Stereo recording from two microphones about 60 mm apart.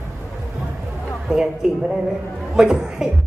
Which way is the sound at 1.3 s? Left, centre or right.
Centre.